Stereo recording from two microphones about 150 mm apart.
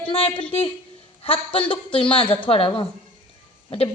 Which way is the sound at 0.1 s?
40° left (ahead or behind).